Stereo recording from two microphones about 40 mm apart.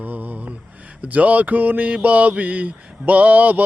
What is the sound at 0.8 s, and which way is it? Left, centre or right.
Speech, right.